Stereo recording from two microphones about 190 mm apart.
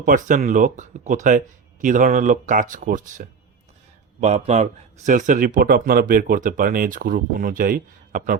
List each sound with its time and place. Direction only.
0.0 s a man's voice: 45° right (ahead or behind)